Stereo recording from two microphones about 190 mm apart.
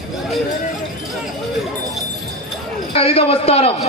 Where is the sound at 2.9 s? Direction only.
30° left (ahead or behind).